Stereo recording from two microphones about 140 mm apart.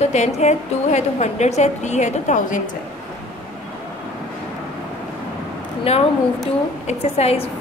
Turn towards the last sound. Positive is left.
turn(degrees=45)  # may be behind; listen again after turning